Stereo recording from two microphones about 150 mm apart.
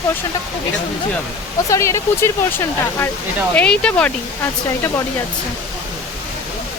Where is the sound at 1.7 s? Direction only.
20° left (ahead or behind).